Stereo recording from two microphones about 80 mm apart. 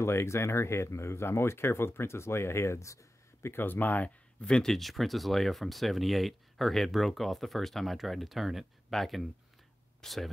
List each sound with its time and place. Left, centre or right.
0.0 s speech: left
3.5 s speech: left; by 10.3 s centre